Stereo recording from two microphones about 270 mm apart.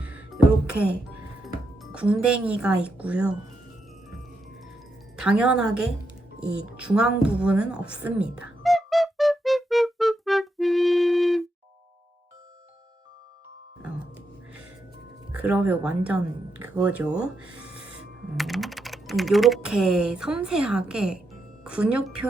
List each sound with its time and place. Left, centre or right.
0.0 s music: centre
1.8 s speech: centre
5.1 s speech: centre
6.7 s a sound: centre
15.4 s speech: centre